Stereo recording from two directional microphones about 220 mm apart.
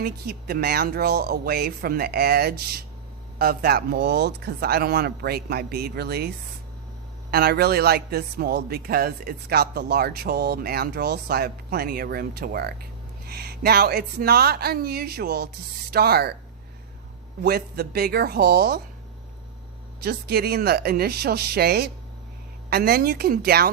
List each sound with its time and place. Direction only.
0.0 s a man's voice: 45° right (ahead or behind)
17.4 s a man's voice: 45° right (ahead or behind)
20.0 s a man's voice: 45° right (ahead or behind)